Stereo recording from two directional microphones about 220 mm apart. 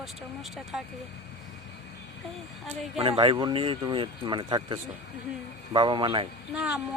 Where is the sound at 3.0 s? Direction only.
25° right (ahead or behind).